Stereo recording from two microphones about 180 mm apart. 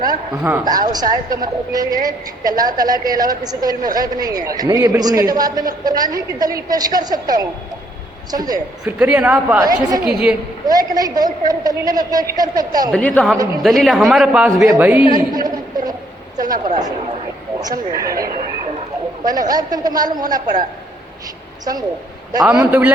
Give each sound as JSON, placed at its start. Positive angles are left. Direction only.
{"t": 0.6, "sound": "a woman's voice", "side_deg": -20}
{"t": 8.8, "sound": "speech", "side_deg": -5}
{"t": 9.6, "sound": "a woman's voice", "side_deg": -20}
{"t": 10.1, "sound": "speech", "side_deg": -5}
{"t": 10.7, "sound": "a woman's voice", "side_deg": -20}
{"t": 12.9, "sound": "a woman's voice", "side_deg": 5}
{"t": 15.2, "sound": "a sound", "side_deg": -20}
{"t": 16.5, "sound": "speech", "side_deg": -45}
{"t": 17.6, "sound": "a woman's voice", "side_deg": -20}
{"t": 19.2, "sound": "a woman's voice", "side_deg": -20}
{"t": 22.6, "sound": "a woman's voice", "side_deg": -10}